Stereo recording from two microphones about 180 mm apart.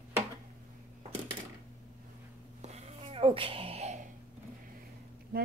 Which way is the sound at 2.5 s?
35° right (ahead or behind).